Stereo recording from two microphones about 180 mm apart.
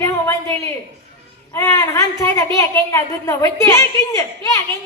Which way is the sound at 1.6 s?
15° left (ahead or behind).